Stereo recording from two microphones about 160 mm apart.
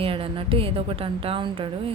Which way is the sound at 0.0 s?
35° right (ahead or behind).